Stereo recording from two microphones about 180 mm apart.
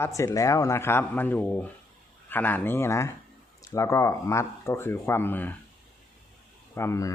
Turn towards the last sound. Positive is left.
turn(degrees=15)  # may be behind; listen again after turning